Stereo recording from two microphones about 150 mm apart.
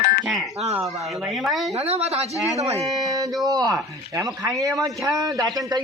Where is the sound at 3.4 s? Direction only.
25° right (ahead or behind).